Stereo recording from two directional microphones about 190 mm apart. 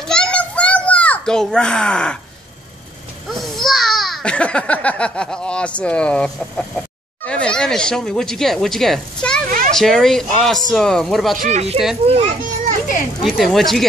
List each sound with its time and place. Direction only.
0.0 s children playing: 5° left (ahead or behind)
3.3 s a child's voice: centre (ahead or behind)
11.3 s a child's voice: 40° right (ahead or behind)
13.2 s speech: centre (ahead or behind)